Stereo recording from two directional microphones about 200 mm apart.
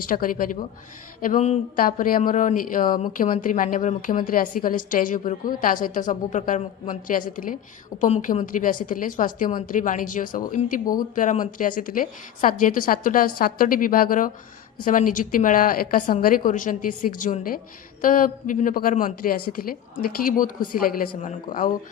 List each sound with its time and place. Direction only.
0.1 s a woman's voice: 45° left (ahead or behind)